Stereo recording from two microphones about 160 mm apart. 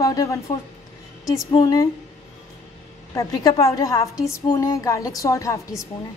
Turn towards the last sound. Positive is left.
turn(degrees=20)  # may be behind; listen again after turning